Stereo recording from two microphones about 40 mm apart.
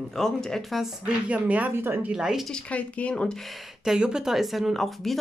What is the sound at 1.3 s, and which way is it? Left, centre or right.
Speech, right.